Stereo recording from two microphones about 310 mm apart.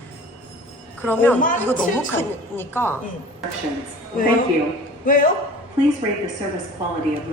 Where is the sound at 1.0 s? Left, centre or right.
Centre.